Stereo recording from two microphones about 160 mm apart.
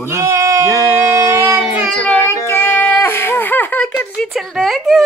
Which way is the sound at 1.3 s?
15° right (ahead or behind).